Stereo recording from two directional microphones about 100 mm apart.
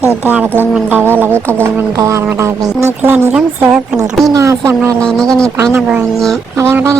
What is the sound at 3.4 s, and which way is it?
Speech, 10° right (ahead or behind).